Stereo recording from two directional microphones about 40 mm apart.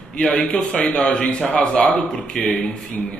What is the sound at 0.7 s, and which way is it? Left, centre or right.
Speech, left.